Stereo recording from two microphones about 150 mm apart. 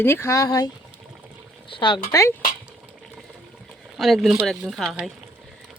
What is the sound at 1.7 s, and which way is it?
Speech, 30° left (ahead or behind).